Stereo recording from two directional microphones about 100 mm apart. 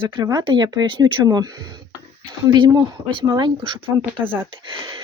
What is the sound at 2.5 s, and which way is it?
Speech, 50° right (ahead or behind).